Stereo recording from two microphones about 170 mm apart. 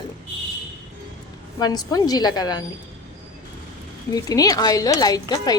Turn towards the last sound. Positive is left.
turn(degrees=25)  # may be behind; listen again after turning